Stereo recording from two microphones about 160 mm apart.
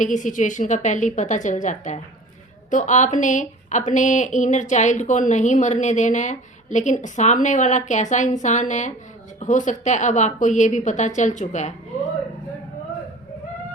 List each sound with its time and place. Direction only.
0.0 s speech: 50° left (ahead or behind)